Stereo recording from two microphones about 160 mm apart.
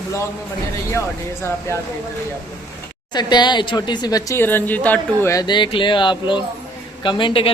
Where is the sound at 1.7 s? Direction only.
20° left (ahead or behind).